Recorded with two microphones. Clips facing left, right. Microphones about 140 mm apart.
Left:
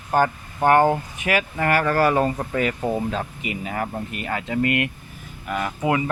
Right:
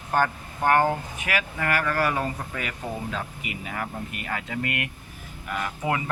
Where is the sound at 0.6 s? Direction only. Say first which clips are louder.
Left 5 dB; 25° left (ahead or behind).